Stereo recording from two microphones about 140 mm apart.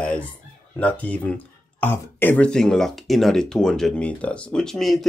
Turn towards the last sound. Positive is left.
turn(degrees=0)  # may be behind; listen again after turning